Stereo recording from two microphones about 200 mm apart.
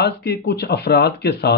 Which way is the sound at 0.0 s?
55° left (ahead or behind).